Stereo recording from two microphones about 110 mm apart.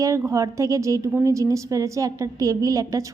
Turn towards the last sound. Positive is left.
turn(degrees=-30)  # may be behind; listen again after turning